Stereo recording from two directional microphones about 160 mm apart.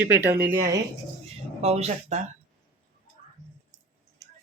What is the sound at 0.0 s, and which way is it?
Speech, 15° right (ahead or behind).